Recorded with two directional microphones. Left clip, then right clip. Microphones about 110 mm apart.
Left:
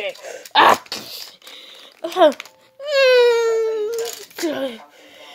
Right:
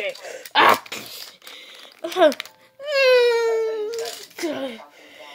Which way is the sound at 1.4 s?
30° left (ahead or behind).